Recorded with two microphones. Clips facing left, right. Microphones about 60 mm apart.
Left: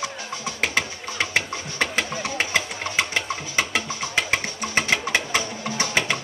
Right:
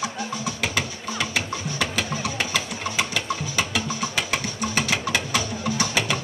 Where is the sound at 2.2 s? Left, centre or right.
Left.